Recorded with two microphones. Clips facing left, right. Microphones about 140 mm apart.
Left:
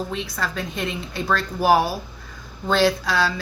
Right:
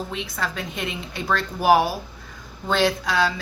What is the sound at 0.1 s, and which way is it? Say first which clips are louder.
Speech: left 1 dB; 15° right (ahead or behind).